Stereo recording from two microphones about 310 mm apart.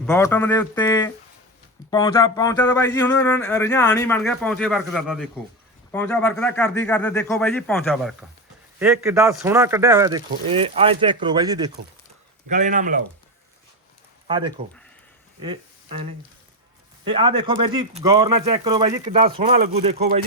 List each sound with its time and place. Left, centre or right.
0.0 s speech: centre
8.8 s speech: centre
12.5 s speech: right
14.3 s speech: centre
17.1 s speech: centre